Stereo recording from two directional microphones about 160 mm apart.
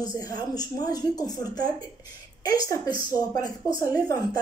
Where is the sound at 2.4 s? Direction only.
25° left (ahead or behind).